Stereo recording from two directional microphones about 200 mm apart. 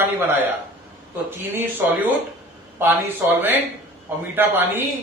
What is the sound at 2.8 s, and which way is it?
Speech, 10° right (ahead or behind).